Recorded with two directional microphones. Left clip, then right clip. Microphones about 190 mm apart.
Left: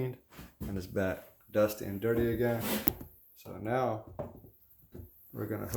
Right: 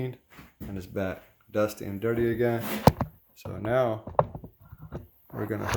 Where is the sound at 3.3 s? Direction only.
65° right (ahead or behind).